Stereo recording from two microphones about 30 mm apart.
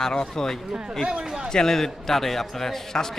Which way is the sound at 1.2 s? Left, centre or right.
Right.